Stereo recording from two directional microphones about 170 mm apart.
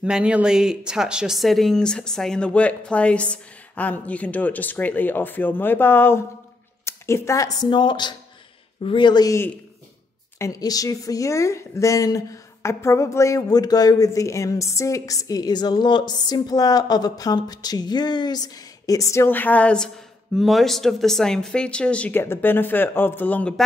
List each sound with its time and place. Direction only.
0.0 s a woman's voice: 5° right (ahead or behind)